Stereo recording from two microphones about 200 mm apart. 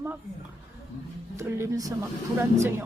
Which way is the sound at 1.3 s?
15° right (ahead or behind).